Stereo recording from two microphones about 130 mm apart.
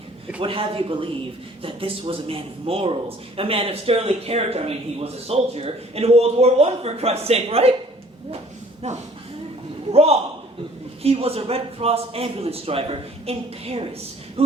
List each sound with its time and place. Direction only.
0.3 s a man's voice: 45° right (ahead or behind)
9.9 s a sound: 50° right (ahead or behind)
11.0 s a man's voice: 50° right (ahead or behind)